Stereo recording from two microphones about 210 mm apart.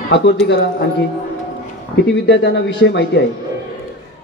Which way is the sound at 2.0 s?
60° left (ahead or behind).